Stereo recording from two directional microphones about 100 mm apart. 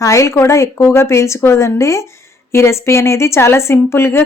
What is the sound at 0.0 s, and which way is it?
A woman's voice, 30° left (ahead or behind).